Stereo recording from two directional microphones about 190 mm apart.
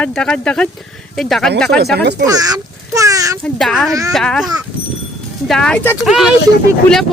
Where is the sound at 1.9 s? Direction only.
60° right (ahead or behind).